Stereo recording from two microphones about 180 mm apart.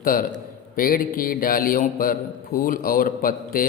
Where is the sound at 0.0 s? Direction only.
50° left (ahead or behind).